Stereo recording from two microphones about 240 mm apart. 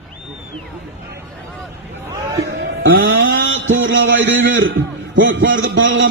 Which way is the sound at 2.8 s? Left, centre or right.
Right.